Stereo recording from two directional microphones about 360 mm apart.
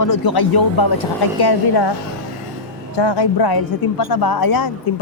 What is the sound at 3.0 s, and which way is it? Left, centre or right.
Speech, left.